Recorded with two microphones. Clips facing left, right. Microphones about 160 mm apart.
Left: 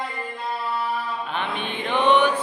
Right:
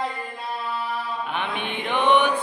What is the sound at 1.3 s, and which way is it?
Mantra, 15° right (ahead or behind).